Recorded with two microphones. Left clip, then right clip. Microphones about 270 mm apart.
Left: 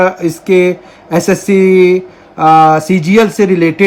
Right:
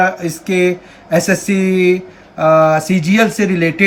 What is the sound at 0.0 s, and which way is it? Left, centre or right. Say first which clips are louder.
Speech: left 3 dB; centre.